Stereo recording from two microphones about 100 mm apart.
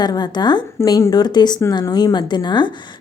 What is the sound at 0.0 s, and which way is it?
Speech, 45° left (ahead or behind).